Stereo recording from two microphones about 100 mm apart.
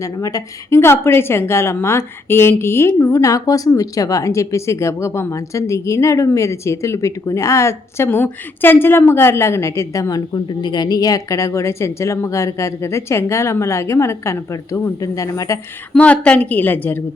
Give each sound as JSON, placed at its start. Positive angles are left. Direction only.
{"t": 0.0, "sound": "a woman's voice", "side_deg": 35}
{"t": 0.8, "sound": "speech", "side_deg": 25}
{"t": 15.9, "sound": "a woman's voice", "side_deg": 15}